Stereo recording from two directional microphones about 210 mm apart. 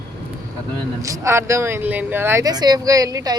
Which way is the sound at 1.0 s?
15° right (ahead or behind).